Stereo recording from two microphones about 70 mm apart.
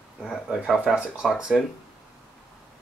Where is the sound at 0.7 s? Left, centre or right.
Centre.